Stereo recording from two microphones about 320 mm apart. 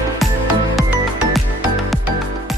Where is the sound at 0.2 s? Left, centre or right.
Centre.